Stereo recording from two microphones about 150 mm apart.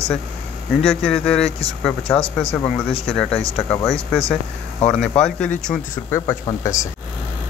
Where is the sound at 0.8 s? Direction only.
5° left (ahead or behind).